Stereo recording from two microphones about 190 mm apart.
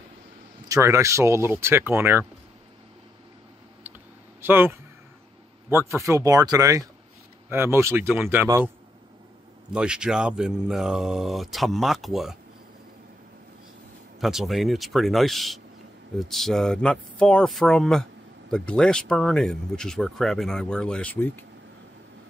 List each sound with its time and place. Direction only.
0.7 s speech: 15° right (ahead or behind)
4.4 s speech: 10° right (ahead or behind)
9.7 s speech: 5° right (ahead or behind)
14.2 s speech: centre (ahead or behind)